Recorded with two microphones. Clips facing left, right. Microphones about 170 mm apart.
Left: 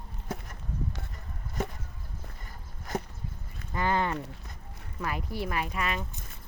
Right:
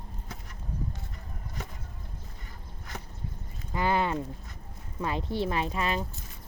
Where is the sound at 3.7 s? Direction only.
15° right (ahead or behind).